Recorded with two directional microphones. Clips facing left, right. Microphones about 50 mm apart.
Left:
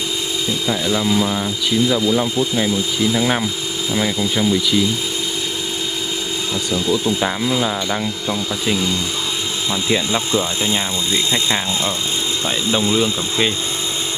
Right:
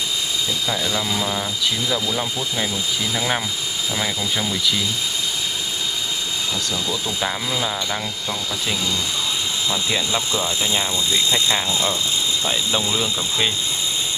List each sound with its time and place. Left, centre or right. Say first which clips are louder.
0.7 s speech: left 7 dB; centre
6.7 s speech: left 7 dB; centre
10.3 s speech: left 3 dB; left
12.9 s speech: left 5 dB; centre